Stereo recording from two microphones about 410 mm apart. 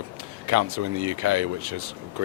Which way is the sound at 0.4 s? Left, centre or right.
Right.